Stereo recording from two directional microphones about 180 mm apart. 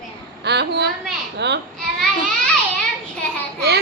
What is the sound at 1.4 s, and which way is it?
Laughter, 75° right (ahead or behind).